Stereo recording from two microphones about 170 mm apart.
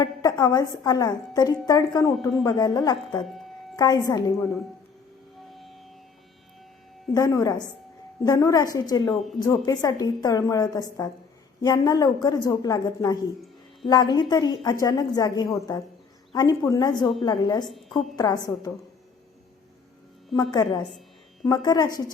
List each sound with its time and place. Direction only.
0.0 s a woman's voice: 20° left (ahead or behind)
3.2 s speech: centre (ahead or behind)
3.8 s a woman's voice: 20° left (ahead or behind)
5.5 s music: centre (ahead or behind)
7.1 s a woman's voice: 20° left (ahead or behind)
17.7 s a woman's voice: centre (ahead or behind)
18.2 s a woman's voice: 25° left (ahead or behind)
20.3 s a woman's voice: 25° left (ahead or behind)